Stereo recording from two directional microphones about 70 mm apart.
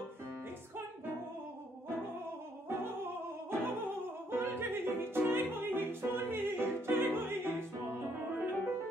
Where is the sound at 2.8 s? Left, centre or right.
Right.